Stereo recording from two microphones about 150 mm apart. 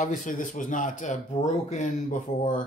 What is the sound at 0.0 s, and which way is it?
Speech, 60° left (ahead or behind).